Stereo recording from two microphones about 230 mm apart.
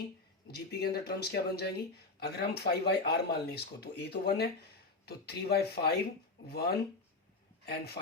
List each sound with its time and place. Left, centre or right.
0.4 s a man's voice: left